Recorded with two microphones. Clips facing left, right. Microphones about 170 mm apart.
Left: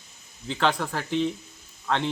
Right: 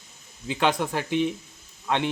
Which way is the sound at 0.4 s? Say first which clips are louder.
Right 1 dB; 15° right (ahead or behind).